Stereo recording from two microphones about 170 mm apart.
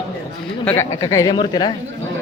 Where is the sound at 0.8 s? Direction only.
20° left (ahead or behind).